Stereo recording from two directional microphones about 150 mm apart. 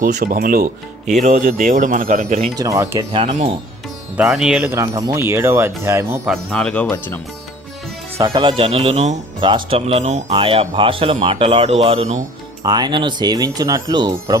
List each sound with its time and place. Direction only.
0.0 s speech: 80° right
1.1 s speech: 55° right (ahead or behind)
2.6 s speech: 20° right (ahead or behind)
3.1 s speech: 40° right (ahead or behind)
4.2 s speech: 5° right (ahead or behind)
4.7 s speech: 25° right (ahead or behind)
6.2 s speech: 5° left (ahead or behind)
8.2 s speech: 30° right (ahead or behind); by 12.2 s 45° right (ahead or behind)
12.6 s speech: 25° right (ahead or behind)